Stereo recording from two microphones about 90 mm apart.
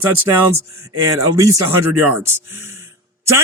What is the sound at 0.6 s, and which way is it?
Speech, 35° right (ahead or behind).